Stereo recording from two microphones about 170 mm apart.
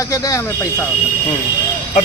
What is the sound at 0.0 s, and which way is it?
Speech, 20° left (ahead or behind).